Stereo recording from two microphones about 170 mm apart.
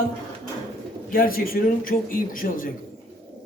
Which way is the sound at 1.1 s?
60° left (ahead or behind).